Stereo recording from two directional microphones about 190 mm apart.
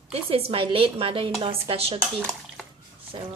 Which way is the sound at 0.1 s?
30° right (ahead or behind).